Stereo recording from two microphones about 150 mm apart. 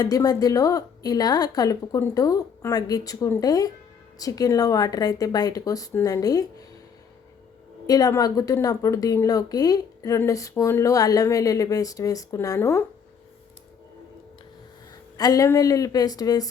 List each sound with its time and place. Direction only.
0.0 s a woman's voice: 25° left (ahead or behind)
7.9 s a woman's voice: 25° left (ahead or behind)
15.2 s a woman's voice: 25° left (ahead or behind)